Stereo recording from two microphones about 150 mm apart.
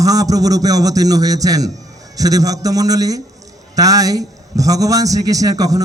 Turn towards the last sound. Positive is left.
turn(degrees=-25)  # may be behind; listen again after turning